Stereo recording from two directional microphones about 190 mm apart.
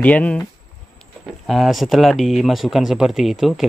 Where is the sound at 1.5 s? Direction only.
Centre (ahead or behind).